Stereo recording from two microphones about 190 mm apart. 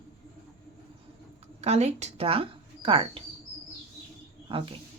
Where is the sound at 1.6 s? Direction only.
35° right (ahead or behind).